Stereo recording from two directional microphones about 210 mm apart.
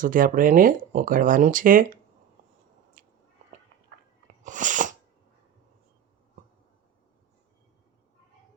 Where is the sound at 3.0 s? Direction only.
45° right (ahead or behind).